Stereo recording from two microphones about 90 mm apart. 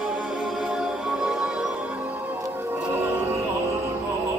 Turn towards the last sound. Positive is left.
turn(degrees=-25)  # may be behind; listen again after turning